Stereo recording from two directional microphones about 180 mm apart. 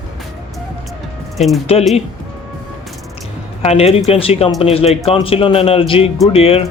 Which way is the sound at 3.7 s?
35° left (ahead or behind).